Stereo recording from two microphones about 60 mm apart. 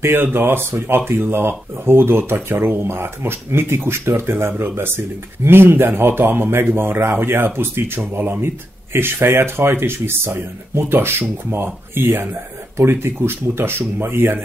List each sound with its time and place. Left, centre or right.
0.0 s speech: right